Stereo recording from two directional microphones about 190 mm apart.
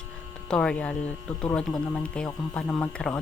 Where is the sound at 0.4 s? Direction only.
5° left (ahead or behind).